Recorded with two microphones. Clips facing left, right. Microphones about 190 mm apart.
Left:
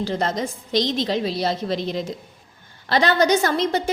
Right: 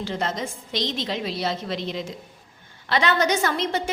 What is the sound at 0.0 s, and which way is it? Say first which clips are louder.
A woman's voice: left 4 dB; 40° left (ahead or behind).